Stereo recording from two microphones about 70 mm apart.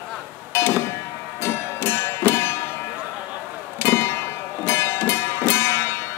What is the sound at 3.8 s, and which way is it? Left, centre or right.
Music, left.